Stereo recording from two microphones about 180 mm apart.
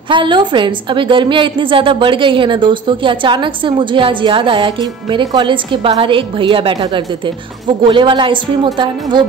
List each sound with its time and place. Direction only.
0.1 s a woman's voice: 25° right (ahead or behind)